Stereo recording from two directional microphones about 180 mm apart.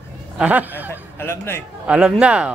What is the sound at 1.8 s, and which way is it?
Speech, 5° right (ahead or behind).